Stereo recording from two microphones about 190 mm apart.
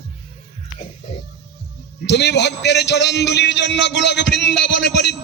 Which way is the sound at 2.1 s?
65° left (ahead or behind).